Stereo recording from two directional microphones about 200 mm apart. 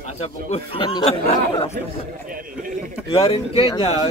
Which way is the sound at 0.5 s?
30° left (ahead or behind).